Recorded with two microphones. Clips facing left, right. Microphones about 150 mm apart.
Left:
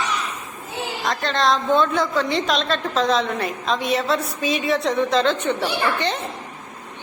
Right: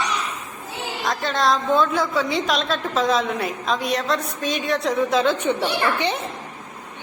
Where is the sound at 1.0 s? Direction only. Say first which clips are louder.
Even; centre (ahead or behind).